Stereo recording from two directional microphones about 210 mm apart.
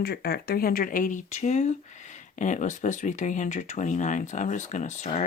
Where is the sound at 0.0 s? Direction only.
50° left (ahead or behind).